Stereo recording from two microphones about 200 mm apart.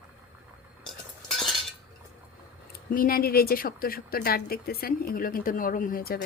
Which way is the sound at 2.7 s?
45° left (ahead or behind).